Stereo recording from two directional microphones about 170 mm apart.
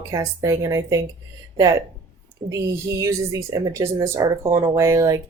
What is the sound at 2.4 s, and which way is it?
Speech, 20° right (ahead or behind).